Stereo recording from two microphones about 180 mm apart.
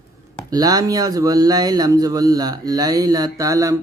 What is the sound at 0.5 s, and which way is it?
Speech, 20° right (ahead or behind).